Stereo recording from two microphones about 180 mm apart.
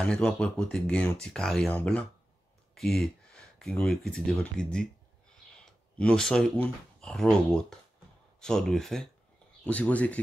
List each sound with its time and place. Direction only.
0.0 s speech: 5° left (ahead or behind)
5.7 s a sound: 5° left (ahead or behind)
7.0 s speech: 5° left (ahead or behind)